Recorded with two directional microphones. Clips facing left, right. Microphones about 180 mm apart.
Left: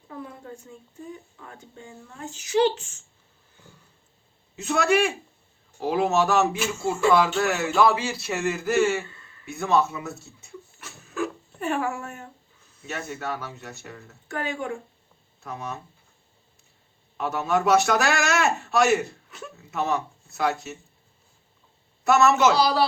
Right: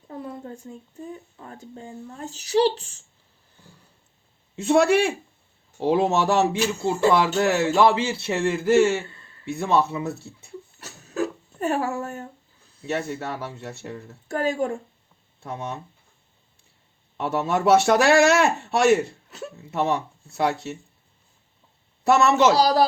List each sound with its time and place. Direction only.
1.4 s speech: 35° right (ahead or behind)
4.5 s a man's voice: 30° right (ahead or behind)
17.2 s speech: 30° right (ahead or behind)
22.0 s speech: 30° right (ahead or behind)